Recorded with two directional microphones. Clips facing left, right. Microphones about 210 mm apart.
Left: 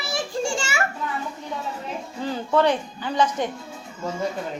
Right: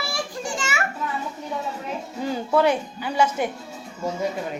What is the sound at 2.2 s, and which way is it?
Speech, 10° right (ahead or behind).